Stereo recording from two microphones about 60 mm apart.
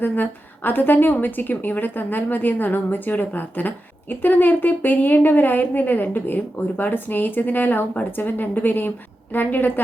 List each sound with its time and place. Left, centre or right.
0.0 s a woman's voice: left